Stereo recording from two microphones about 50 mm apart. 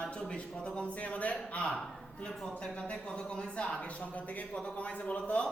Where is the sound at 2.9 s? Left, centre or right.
Centre.